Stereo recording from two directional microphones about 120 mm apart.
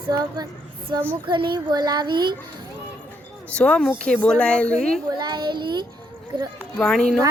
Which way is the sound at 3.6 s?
10° left (ahead or behind).